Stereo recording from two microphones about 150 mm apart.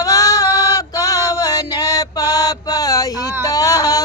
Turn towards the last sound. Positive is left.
turn(degrees=25)  # may be behind; listen again after turning